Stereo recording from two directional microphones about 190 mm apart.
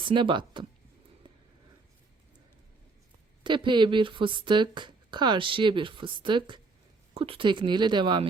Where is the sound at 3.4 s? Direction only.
25° right (ahead or behind).